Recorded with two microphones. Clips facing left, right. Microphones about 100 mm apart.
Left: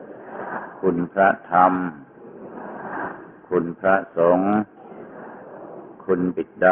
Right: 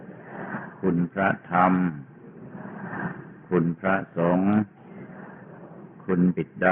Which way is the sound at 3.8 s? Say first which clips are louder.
Left 6 dB; 35° left (ahead or behind).